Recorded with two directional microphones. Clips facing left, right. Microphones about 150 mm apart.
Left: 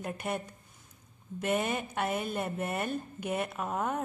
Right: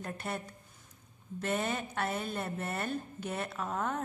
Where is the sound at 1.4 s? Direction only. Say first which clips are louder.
Left 3 dB; 10° left (ahead or behind).